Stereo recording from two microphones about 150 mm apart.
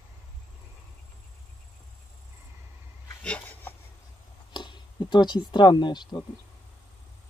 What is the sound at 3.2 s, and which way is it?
Dog, 10° left (ahead or behind).